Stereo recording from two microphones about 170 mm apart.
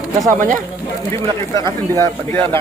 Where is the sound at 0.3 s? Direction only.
50° right (ahead or behind).